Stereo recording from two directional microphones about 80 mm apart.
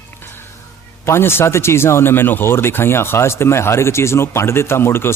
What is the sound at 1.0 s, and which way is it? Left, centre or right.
A man's voice, left.